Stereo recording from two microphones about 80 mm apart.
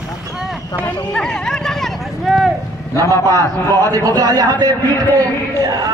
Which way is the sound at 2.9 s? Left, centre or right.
Left.